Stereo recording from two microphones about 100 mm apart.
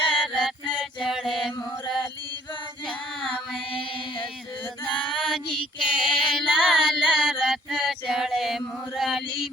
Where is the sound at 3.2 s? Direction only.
5° left (ahead or behind).